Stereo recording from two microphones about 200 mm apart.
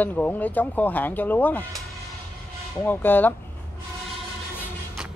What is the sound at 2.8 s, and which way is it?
Speech, 10° left (ahead or behind).